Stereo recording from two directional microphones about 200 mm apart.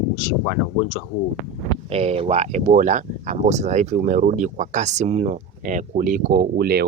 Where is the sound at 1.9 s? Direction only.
30° right (ahead or behind).